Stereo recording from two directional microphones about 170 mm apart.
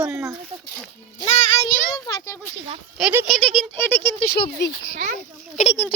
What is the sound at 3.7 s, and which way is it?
Speech, 15° left (ahead or behind).